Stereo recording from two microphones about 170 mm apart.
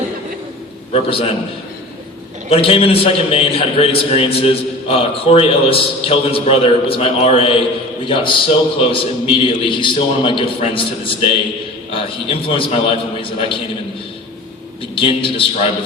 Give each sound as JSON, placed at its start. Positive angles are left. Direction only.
{"t": 0.9, "sound": "a man's voice", "side_deg": 35}
{"t": 2.5, "sound": "a man's voice", "side_deg": 35}
{"t": 14.9, "sound": "a man's voice", "side_deg": 30}